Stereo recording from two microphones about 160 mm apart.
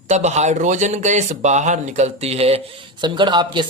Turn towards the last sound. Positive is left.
turn(degrees=-30)  # may be behind; listen again after turning